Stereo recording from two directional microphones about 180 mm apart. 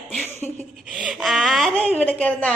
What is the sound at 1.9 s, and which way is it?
Speech, 10° left (ahead or behind).